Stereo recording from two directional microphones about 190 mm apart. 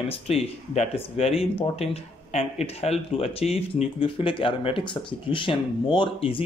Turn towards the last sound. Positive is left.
turn(degrees=30)  # may be behind; listen again after turning